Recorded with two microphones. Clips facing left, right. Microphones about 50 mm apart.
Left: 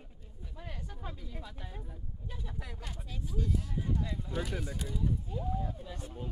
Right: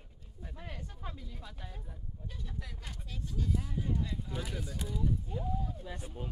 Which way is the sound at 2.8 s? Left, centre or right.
Centre.